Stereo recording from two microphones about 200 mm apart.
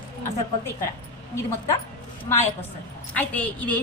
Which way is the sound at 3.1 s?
5° left (ahead or behind).